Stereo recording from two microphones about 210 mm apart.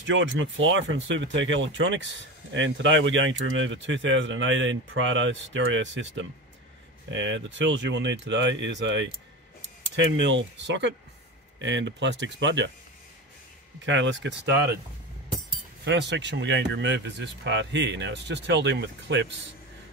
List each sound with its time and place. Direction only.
0.0 s speech: 60° right (ahead or behind)
10.1 s speech: 60° right (ahead or behind)
13.7 s speech: 60° right (ahead or behind)
15.8 s speech: 55° right (ahead or behind)